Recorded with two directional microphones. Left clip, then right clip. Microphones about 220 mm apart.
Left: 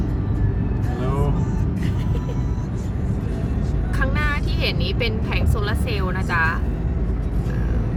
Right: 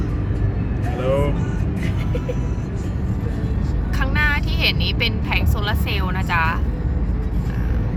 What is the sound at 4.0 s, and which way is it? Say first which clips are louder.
Speech: right 4 dB; 5° right (ahead or behind).